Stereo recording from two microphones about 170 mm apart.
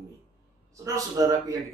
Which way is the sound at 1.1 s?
20° right (ahead or behind).